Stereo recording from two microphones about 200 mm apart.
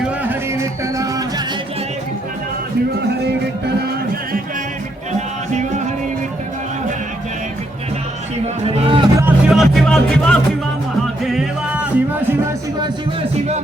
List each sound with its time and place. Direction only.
0.0 s music: 10° right (ahead or behind)
8.6 s music: 25° right (ahead or behind)
9.2 s music: centre (ahead or behind)